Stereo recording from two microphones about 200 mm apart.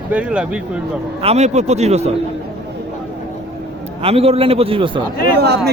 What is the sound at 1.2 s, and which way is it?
Speech, 35° right (ahead or behind).